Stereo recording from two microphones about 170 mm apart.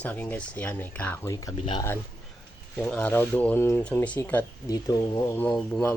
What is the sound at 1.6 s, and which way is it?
Speech, 30° left (ahead or behind).